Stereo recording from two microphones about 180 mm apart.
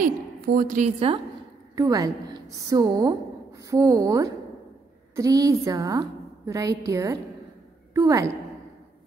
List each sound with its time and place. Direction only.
0.6 s a woman's voice: 45° right (ahead or behind)
0.9 s a woman's voice: 30° right (ahead or behind)
1.8 s a woman's voice: 20° right (ahead or behind)